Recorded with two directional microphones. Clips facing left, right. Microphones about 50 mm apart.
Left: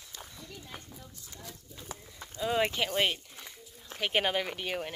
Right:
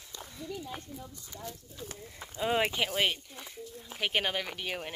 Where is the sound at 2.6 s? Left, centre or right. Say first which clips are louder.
Even; centre.